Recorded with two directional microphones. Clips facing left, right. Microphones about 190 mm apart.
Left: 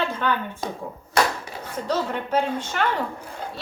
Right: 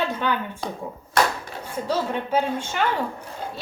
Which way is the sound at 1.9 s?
10° right (ahead or behind).